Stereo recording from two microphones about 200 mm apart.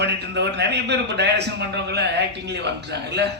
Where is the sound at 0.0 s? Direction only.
60° right (ahead or behind).